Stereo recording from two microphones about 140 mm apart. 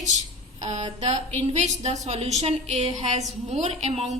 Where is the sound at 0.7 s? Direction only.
50° right (ahead or behind).